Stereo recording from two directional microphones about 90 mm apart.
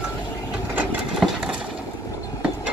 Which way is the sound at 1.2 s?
5° right (ahead or behind).